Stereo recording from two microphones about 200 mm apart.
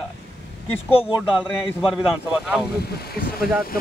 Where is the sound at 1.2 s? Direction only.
5° right (ahead or behind).